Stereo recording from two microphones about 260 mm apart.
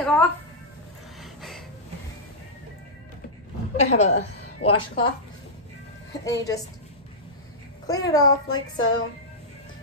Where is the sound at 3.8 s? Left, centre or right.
Left.